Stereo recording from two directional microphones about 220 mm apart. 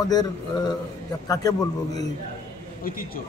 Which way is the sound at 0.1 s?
20° left (ahead or behind).